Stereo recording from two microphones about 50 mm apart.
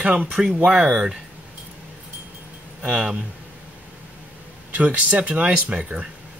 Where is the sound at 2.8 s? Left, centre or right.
Right.